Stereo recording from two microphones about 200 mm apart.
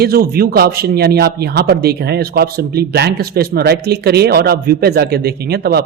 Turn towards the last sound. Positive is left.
turn(degrees=-50)  # may be behind; listen again after turning